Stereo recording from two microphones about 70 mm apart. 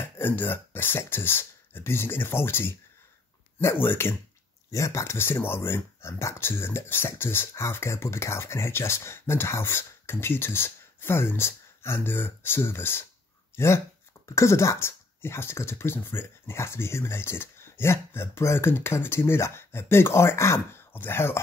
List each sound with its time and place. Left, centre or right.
0.2 s speech: left
4.6 s speech: left